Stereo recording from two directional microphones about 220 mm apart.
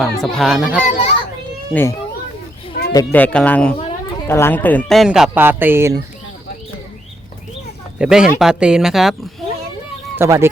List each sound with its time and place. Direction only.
0.0 s speech: centre (ahead or behind)
0.9 s a child's voice: 30° left (ahead or behind)
1.7 s a man's voice: 10° left (ahead or behind); by 6.0 s 10° right (ahead or behind)
7.9 s speech: 5° right (ahead or behind)
10.2 s speech: 10° right (ahead or behind)